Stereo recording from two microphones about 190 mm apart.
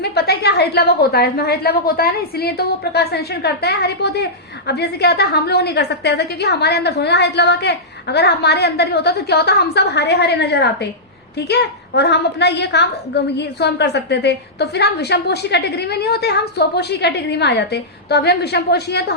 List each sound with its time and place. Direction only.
0.0 s a woman's voice: 60° left (ahead or behind)